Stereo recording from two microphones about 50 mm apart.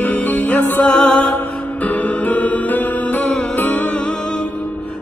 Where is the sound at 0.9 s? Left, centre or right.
Left.